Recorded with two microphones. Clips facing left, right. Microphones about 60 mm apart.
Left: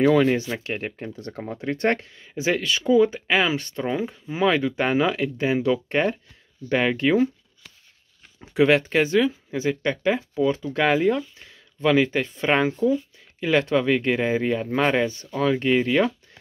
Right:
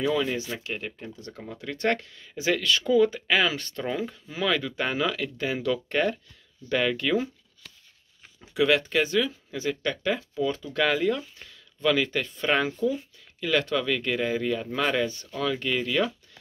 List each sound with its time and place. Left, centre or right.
0.0 s speech: left
8.4 s speech: left